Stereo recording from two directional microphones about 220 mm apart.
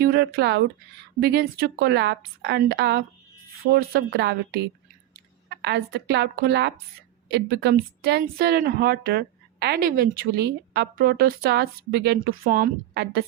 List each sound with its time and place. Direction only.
0.0 s a woman's voice: 45° right (ahead or behind)